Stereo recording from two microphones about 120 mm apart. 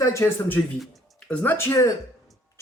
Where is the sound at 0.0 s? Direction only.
25° left (ahead or behind).